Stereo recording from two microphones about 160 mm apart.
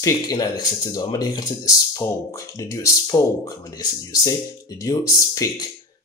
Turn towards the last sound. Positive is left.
turn(degrees=20)  # may be behind; listen again after turning